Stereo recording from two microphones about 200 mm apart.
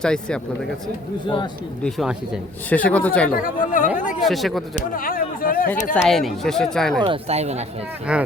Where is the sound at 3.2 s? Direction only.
45° left (ahead or behind).